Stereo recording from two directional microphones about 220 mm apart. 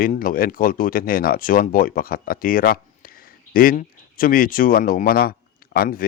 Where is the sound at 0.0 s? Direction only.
40° left (ahead or behind).